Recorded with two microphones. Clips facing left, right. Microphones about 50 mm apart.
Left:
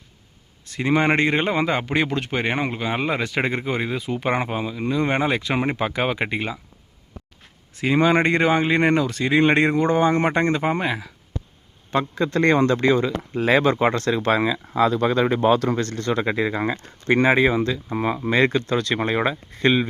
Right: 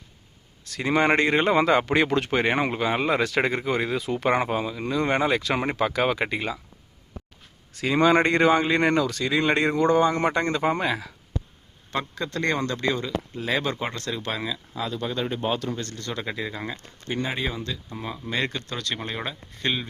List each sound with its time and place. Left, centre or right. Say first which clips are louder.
0.6 s a sound: left 4 dB; centre
0.9 s speech: left 1 dB; centre
7.8 s speech: left 1 dB; centre; by 13.1 s left
13.3 s speech: left 10 dB; left
14.7 s speech: left 13 dB; left
16.0 s speech: left 9 dB; left
17.1 s speech: left 11 dB; left
17.3 s speech: left 11 dB; left
17.6 s speech: left 10 dB; left